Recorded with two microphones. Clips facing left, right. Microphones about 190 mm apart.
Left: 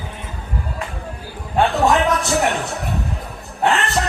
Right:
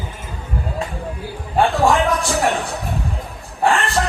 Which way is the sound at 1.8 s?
20° left (ahead or behind).